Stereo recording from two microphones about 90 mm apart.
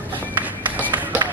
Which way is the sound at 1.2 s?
55° right (ahead or behind).